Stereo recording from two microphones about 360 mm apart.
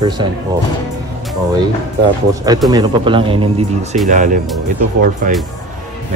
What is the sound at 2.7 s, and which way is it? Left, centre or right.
Speech, centre.